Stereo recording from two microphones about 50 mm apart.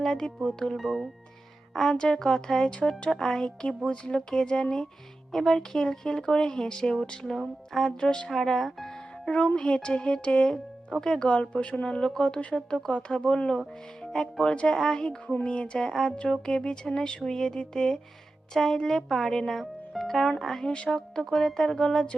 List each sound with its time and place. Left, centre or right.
0.0 s speech: centre
0.8 s speech: centre
1.7 s speech: centre
9.2 s speech: left
11.3 s speech: left
14.5 s speech: left; by 20.7 s centre
20.7 s speech: centre